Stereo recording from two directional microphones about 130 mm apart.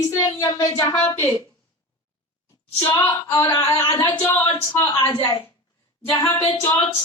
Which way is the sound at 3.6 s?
40° left (ahead or behind).